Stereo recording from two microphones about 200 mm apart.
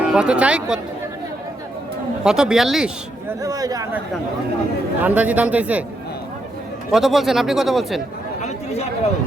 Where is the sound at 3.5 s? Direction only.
20° right (ahead or behind).